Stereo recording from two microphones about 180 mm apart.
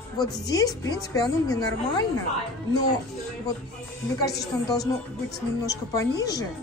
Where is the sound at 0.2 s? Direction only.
20° left (ahead or behind).